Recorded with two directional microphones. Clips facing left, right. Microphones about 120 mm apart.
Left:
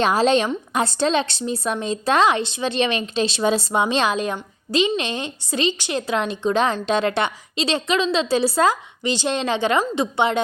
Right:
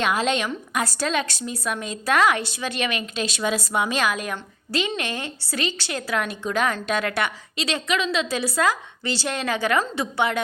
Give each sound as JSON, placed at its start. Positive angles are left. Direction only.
{"t": 0.0, "sound": "a woman's voice", "side_deg": 30}